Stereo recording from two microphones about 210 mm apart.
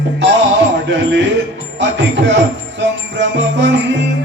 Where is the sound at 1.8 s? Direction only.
60° right (ahead or behind).